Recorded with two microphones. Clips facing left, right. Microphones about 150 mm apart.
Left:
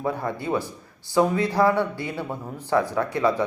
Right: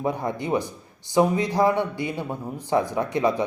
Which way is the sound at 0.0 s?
20° right (ahead or behind).